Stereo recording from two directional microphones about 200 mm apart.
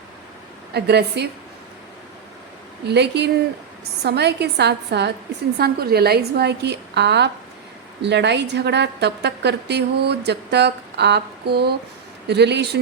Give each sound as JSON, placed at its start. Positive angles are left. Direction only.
{"t": 0.7, "sound": "a woman's voice", "side_deg": -55}
{"t": 2.8, "sound": "a woman's voice", "side_deg": -55}